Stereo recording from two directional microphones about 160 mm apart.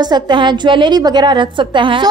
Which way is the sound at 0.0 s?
30° right (ahead or behind).